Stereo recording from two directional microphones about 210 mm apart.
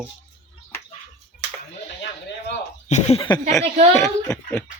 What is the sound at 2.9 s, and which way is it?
Speech, 30° left (ahead or behind).